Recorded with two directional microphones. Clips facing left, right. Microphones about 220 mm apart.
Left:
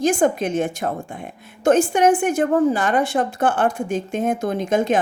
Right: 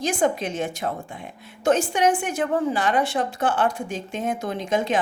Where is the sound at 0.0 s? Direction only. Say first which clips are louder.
Left 5 dB; 50° left (ahead or behind).